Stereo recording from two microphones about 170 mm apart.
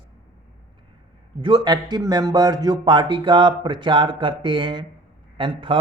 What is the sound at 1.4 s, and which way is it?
Speech, 25° right (ahead or behind).